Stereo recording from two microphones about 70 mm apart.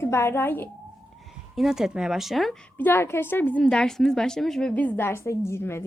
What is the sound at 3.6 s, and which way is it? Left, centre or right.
Speech, centre.